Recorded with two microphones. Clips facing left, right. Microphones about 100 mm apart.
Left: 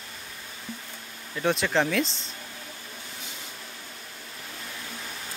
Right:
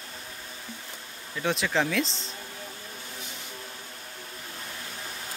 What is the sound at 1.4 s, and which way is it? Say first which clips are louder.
Speech: left 2 dB; centre (ahead or behind).